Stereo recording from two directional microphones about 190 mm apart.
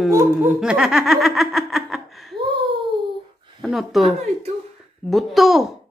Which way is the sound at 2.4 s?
25° right (ahead or behind).